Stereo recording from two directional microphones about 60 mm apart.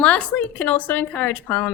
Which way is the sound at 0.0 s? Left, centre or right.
Left.